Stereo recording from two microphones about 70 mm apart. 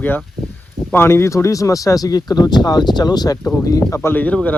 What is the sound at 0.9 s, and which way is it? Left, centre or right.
Speech, left.